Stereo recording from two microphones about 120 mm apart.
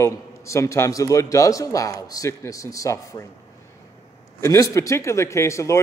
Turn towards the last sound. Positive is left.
turn(degrees=25)  # may be behind; listen again after turning